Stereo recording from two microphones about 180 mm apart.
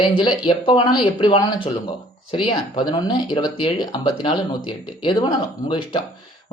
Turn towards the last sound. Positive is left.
turn(degrees=25)  # may be behind; listen again after turning